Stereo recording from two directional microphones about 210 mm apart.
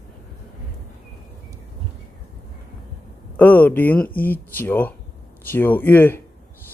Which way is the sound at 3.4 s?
10° left (ahead or behind).